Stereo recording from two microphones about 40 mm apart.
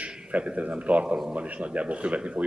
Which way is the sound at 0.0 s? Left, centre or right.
Right.